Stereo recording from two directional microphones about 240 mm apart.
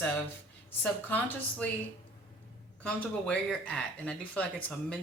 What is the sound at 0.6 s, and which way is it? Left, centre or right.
Speech, centre.